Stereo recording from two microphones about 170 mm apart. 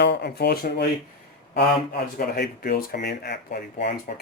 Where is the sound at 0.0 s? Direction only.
85° left; by 0.9 s 70° left (ahead or behind).